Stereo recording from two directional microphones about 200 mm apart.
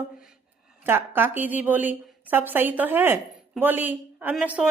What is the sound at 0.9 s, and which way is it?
A woman's voice, 10° right (ahead or behind).